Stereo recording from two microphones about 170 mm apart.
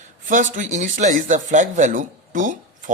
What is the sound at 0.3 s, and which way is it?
Speech, 50° right (ahead or behind).